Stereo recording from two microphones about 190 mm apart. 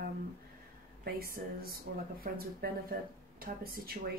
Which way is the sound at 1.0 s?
50° right (ahead or behind).